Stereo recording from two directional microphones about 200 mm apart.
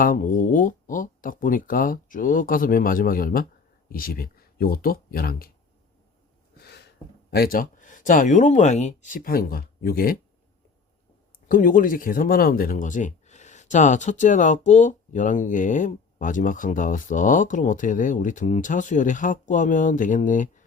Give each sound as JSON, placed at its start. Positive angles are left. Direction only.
{"t": 0.0, "sound": "speech", "side_deg": 45}
{"t": 6.6, "sound": "speech", "side_deg": 55}
{"t": 11.4, "sound": "speech", "side_deg": 45}